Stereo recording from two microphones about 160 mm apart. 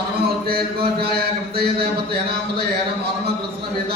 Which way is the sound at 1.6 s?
80° right.